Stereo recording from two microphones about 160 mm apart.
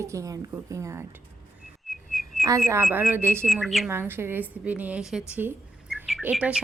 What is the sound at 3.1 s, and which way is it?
Speech, 15° right (ahead or behind).